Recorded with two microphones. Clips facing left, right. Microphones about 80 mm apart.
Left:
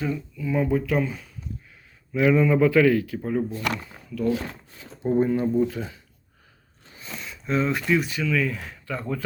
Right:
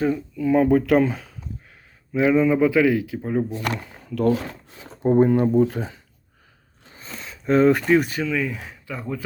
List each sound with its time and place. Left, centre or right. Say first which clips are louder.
0.0 s speech: right 6 dB; right
2.1 s speech: right 2 dB; right
3.8 s a sound: right 5 dB; right
4.9 s speech: right 5 dB; right
7.2 s speech: right 8 dB; right
8.3 s speech: even; centre